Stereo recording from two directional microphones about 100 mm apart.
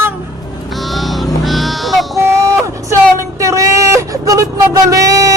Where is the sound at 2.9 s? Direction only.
30° right (ahead or behind).